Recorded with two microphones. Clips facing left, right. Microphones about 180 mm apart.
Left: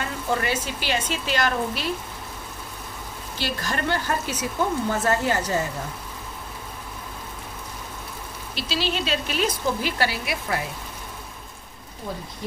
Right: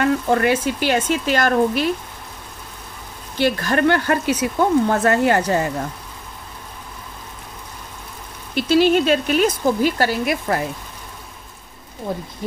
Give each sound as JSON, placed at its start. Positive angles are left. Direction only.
{"t": 0.0, "sound": "speech", "side_deg": -60}
{"t": 3.3, "sound": "speech", "side_deg": -55}
{"t": 8.5, "sound": "speech", "side_deg": -50}